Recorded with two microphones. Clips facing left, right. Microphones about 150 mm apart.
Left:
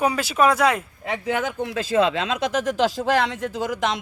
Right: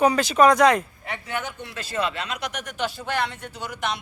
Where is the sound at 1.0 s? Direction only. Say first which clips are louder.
Left 6 dB; 90° left.